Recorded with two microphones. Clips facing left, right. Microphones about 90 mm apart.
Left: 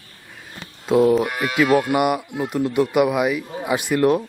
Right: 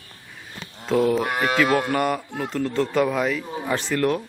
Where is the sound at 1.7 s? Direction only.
15° left (ahead or behind).